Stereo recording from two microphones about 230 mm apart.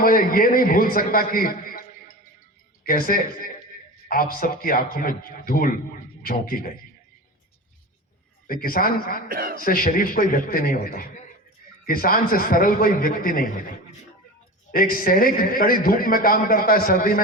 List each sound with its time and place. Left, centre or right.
0.0 s a man's voice: left
2.8 s a man's voice: left
8.4 s a man's voice: left
9.3 s a man's voice: right
9.6 s a man's voice: left
14.7 s a man's voice: left